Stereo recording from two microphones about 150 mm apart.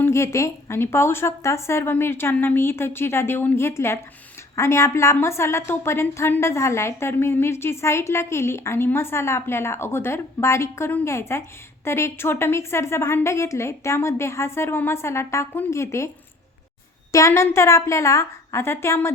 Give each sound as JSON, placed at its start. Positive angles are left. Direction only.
{"t": 0.0, "sound": "a woman's voice", "side_deg": 20}
{"t": 17.1, "sound": "a woman's voice", "side_deg": 20}